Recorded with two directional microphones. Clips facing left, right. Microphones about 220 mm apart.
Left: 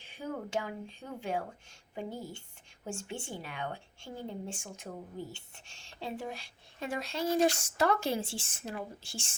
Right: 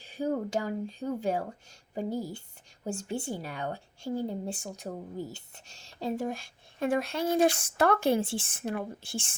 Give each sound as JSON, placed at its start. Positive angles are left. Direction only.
{"t": 0.0, "sound": "a woman's voice", "side_deg": -40}